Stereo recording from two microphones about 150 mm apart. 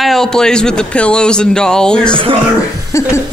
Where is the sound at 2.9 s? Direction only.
20° left (ahead or behind).